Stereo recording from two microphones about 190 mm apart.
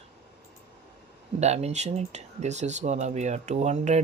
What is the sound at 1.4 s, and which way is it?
Speech, 35° right (ahead or behind).